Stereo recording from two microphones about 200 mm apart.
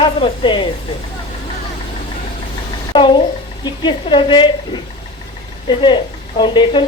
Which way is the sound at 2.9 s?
20° left (ahead or behind).